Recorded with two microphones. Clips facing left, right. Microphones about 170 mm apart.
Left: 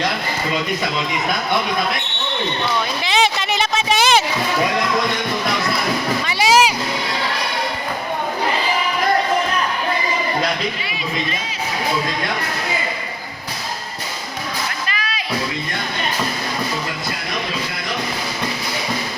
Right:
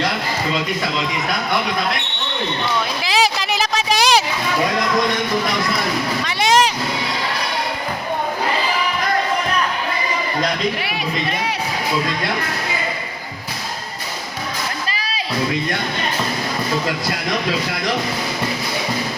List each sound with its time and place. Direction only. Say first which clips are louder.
3.0 s a sound: even; centre (ahead or behind)
6.2 s speech: left 1 dB; 5° left (ahead or behind)
10.8 s speech: right 2 dB; 70° right (ahead or behind)
14.8 s music: even; 30° right (ahead or behind)